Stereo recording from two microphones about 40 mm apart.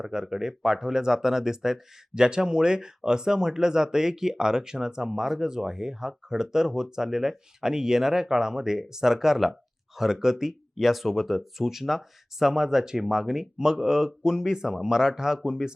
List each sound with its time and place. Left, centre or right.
0.0 s speech: centre